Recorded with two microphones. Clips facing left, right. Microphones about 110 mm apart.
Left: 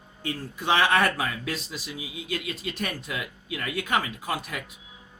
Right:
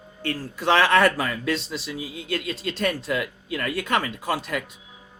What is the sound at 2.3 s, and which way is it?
Speech, 70° right (ahead or behind).